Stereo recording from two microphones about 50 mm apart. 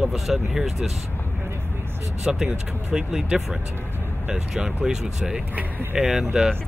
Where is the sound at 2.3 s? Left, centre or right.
Centre.